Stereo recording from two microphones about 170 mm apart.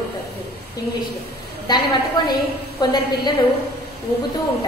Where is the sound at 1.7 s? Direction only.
25° left (ahead or behind).